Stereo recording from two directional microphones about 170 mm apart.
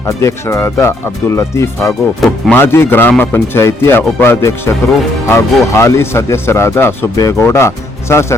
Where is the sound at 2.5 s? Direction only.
15° left (ahead or behind).